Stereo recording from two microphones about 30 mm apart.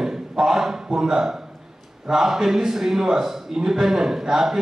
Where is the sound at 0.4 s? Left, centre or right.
Centre.